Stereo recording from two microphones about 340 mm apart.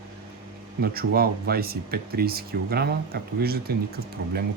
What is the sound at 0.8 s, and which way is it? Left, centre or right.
Speech, right.